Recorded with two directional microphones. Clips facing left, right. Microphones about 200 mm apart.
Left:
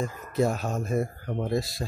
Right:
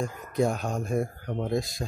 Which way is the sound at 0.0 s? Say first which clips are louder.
Even; centre (ahead or behind).